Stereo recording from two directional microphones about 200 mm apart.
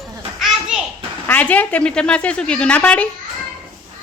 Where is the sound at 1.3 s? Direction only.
10° left (ahead or behind).